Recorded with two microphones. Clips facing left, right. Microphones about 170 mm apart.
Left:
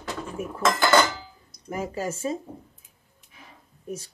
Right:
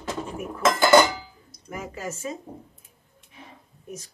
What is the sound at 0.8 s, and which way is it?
Dishes, 15° right (ahead or behind).